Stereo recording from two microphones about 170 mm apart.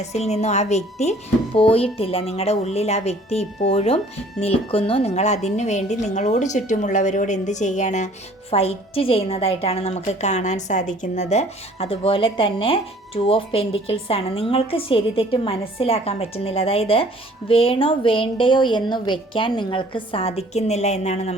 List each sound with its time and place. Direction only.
0.0 s a woman's voice: 40° left (ahead or behind)